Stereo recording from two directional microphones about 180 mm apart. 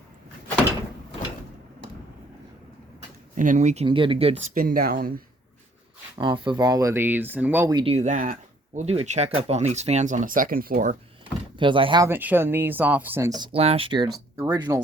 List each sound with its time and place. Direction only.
3.3 s speech: 45° right (ahead or behind)
3.8 s speech: 25° right (ahead or behind)
4.5 s speech: 55° right (ahead or behind)
6.1 s speech: 25° right (ahead or behind)
7.8 s speech: 35° right (ahead or behind); by 10.9 s 50° right (ahead or behind)
11.5 s speech: 25° right (ahead or behind)
12.0 s speech: 10° right (ahead or behind)